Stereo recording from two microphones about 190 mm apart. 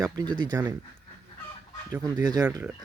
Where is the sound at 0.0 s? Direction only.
20° right (ahead or behind).